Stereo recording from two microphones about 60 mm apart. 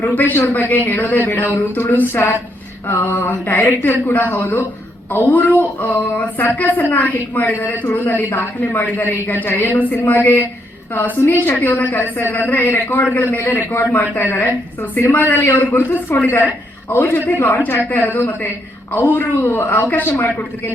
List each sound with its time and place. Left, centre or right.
0.0 s speech: left